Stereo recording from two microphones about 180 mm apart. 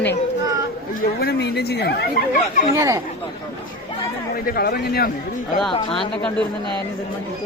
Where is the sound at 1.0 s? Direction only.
60° left (ahead or behind).